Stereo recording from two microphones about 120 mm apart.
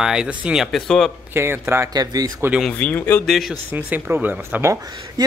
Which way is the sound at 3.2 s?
Centre (ahead or behind).